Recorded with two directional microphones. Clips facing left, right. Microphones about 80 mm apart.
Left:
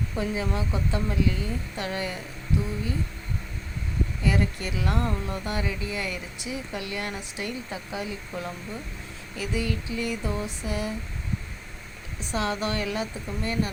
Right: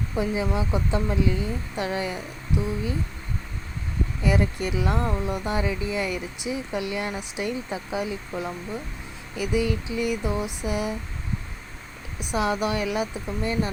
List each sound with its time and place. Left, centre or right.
0.2 s speech: centre
4.2 s speech: centre
12.2 s speech: centre